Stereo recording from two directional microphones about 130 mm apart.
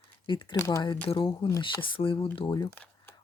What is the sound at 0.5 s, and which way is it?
Speech, 20° left (ahead or behind).